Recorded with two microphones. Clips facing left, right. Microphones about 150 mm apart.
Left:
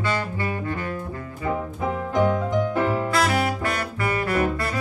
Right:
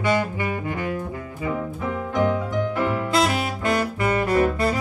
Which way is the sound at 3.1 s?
20° right (ahead or behind).